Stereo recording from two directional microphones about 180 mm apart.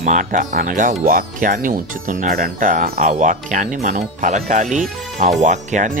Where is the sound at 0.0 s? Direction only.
45° right (ahead or behind).